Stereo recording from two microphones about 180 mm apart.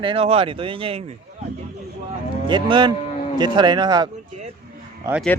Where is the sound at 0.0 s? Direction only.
30° right (ahead or behind).